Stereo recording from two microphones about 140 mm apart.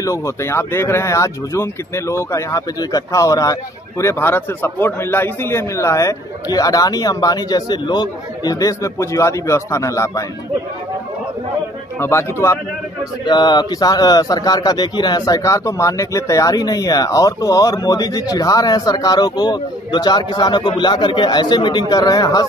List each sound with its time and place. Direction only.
0.0 s a man's voice: 20° left (ahead or behind)
12.0 s a man's voice: 20° left (ahead or behind)
13.2 s a man's voice: 30° left (ahead or behind)